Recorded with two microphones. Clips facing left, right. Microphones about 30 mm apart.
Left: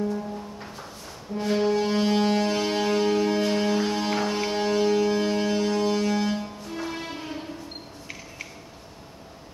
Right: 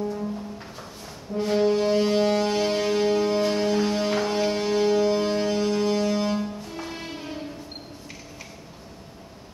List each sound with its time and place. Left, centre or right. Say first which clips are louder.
1.3 s music: right 2 dB; centre